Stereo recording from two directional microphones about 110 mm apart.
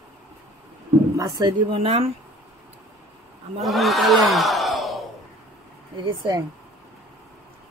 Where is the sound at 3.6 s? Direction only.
Centre (ahead or behind).